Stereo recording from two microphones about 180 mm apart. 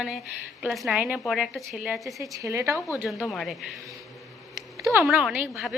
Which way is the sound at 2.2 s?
15° right (ahead or behind).